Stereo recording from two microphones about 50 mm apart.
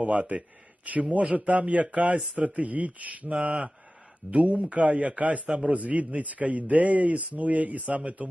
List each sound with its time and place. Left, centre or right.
0.0 s a man's voice: right